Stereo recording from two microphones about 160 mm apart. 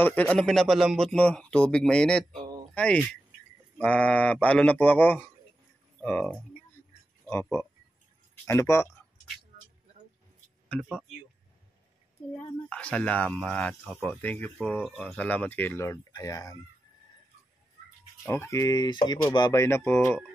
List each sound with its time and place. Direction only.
0.0 s speech: 10° left (ahead or behind)
8.5 s speech: 20° left (ahead or behind)
9.5 s a sound: 60° right (ahead or behind)
12.6 s speech: 5° left (ahead or behind)
18.2 s speech: 15° left (ahead or behind)